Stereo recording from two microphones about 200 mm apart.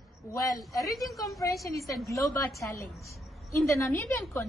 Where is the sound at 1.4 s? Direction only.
15° left (ahead or behind).